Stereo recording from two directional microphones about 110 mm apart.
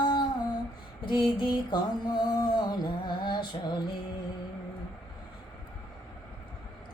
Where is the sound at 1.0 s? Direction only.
45° left (ahead or behind).